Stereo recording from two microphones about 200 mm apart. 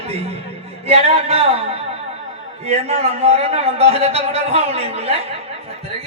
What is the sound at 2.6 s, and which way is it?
A man's voice, 30° right (ahead or behind).